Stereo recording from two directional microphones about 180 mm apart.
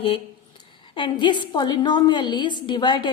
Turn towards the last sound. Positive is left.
turn(degrees=25)  # may be behind; listen again after turning